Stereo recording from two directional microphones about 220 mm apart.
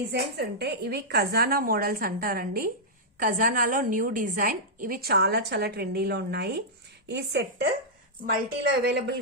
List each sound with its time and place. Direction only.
0.1 s a woman's voice: 50° right (ahead or behind)
8.8 s a woman's voice: 50° right (ahead or behind)